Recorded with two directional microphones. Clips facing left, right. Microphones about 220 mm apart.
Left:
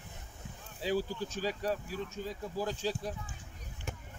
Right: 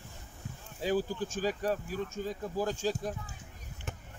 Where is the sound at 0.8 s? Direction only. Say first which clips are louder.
Right 2 dB; 45° right (ahead or behind).